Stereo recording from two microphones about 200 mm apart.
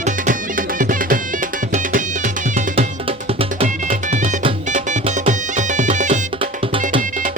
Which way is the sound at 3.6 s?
30° right (ahead or behind).